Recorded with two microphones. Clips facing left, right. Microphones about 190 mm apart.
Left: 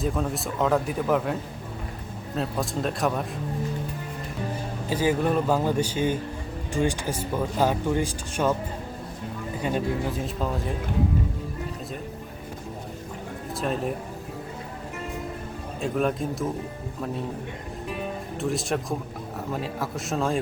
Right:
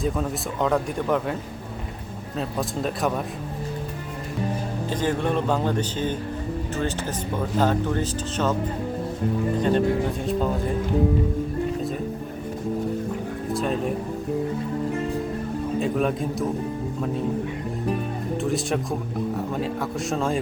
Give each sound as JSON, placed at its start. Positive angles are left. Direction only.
{"t": 0.0, "sound": "speech", "side_deg": 0}
{"t": 4.9, "sound": "speech", "side_deg": 10}
{"t": 9.6, "sound": "speech", "side_deg": 10}
{"t": 13.5, "sound": "speech", "side_deg": 0}
{"t": 15.8, "sound": "speech", "side_deg": 0}
{"t": 18.3, "sound": "speech", "side_deg": 0}